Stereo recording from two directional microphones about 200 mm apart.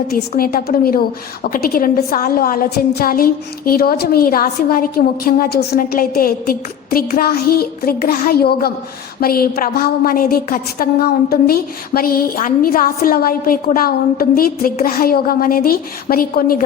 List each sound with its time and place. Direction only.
0.1 s a woman's voice: 45° left (ahead or behind)